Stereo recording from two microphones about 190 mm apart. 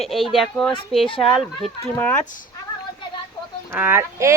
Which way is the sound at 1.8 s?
10° left (ahead or behind).